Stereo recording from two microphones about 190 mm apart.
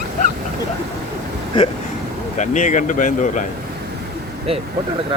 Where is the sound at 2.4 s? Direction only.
40° left (ahead or behind).